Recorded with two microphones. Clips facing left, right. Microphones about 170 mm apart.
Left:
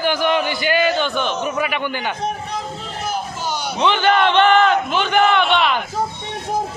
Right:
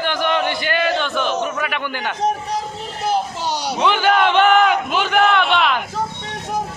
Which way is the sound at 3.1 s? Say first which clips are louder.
Right 4 dB; 35° right (ahead or behind).